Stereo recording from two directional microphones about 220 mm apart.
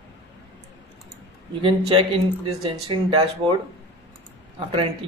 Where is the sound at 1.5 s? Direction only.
25° right (ahead or behind).